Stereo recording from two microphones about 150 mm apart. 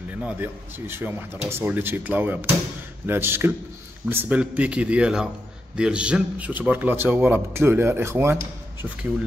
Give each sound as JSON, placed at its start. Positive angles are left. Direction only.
{"t": 0.2, "sound": "a man's voice", "side_deg": -10}